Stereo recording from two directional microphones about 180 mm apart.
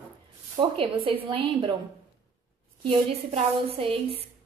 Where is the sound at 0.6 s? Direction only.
30° right (ahead or behind).